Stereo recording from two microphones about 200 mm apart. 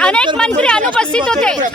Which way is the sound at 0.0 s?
5° left (ahead or behind).